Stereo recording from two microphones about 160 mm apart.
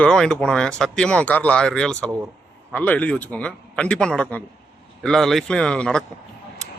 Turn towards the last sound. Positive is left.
turn(degrees=5)  # may be behind; listen again after turning